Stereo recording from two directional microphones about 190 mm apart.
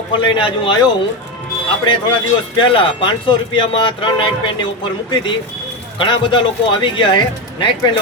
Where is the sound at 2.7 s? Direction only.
25° left (ahead or behind).